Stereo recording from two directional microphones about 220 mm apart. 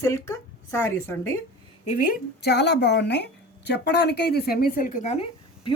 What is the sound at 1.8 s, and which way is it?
Speech, 40° left (ahead or behind).